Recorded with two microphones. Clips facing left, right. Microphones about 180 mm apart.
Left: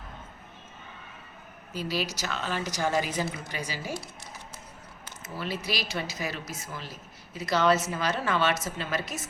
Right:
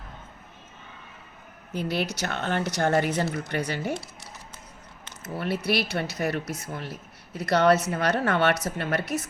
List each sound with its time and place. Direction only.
1.7 s speech: 60° right (ahead or behind)
5.2 s speech: 60° right (ahead or behind)